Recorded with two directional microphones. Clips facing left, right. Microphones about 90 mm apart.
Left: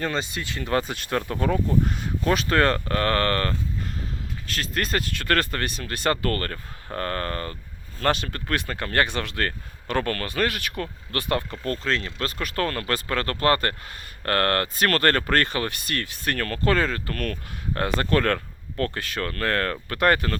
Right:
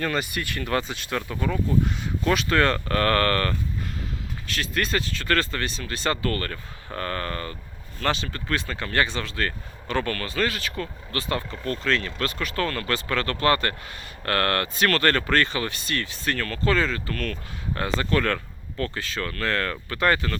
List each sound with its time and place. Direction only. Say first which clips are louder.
0.0 s speech: right 1 dB; 25° left (ahead or behind)
0.8 s speech: left 2 dB; 45° left (ahead or behind)
3.0 s speech: right 2 dB; 25° left (ahead or behind)
4.4 s speech: right 1 dB; 45° left (ahead or behind)
8.0 s speech: left 2 dB; 55° left (ahead or behind)